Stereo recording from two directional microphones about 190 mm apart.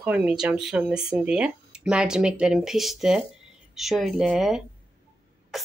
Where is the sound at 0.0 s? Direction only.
5° right (ahead or behind).